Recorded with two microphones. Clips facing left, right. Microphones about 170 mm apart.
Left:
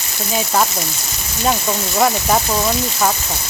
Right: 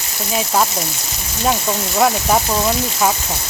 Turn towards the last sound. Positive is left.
turn(degrees=0)  # may be behind; listen again after turning